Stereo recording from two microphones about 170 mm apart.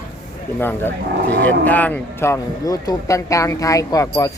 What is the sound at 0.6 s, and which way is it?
Speech, 15° left (ahead or behind).